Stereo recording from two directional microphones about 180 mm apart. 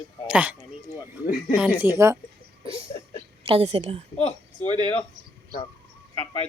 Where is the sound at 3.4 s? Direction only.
30° right (ahead or behind).